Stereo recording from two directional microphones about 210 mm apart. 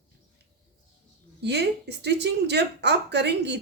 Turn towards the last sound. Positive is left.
turn(degrees=-55)  # may be behind; listen again after turning